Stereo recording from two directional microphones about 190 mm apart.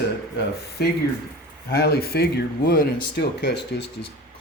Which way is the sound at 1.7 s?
55° left (ahead or behind).